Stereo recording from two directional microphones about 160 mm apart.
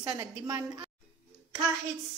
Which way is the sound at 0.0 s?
20° right (ahead or behind).